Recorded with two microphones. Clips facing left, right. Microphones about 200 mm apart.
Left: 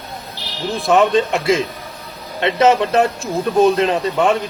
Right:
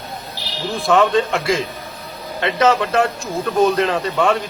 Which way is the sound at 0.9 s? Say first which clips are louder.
Left 1 dB; 20° left (ahead or behind).